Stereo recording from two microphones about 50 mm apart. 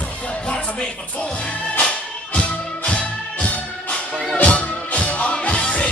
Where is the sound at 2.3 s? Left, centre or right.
Left.